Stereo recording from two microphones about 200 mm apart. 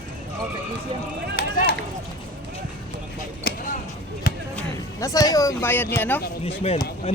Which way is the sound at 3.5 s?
50° left (ahead or behind).